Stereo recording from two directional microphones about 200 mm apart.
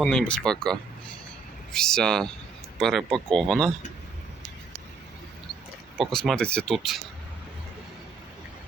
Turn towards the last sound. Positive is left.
turn(degrees=0)  # may be behind; listen again after turning